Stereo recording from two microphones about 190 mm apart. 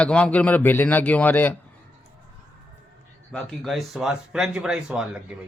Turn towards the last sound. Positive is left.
turn(degrees=-5)  # may be behind; listen again after turning